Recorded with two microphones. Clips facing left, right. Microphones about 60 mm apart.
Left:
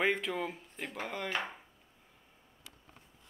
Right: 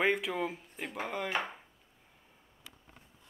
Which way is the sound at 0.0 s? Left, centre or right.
Centre.